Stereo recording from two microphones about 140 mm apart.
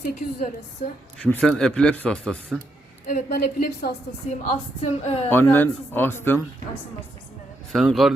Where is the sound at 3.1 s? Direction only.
90° left.